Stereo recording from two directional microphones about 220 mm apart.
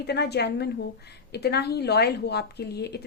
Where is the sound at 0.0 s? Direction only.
50° left (ahead or behind).